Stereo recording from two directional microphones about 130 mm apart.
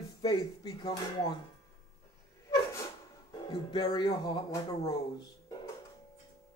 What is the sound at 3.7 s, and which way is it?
Speech, 35° left (ahead or behind).